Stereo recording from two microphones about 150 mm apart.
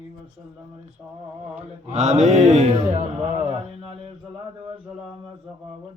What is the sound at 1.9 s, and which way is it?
Speech, 50° right (ahead or behind).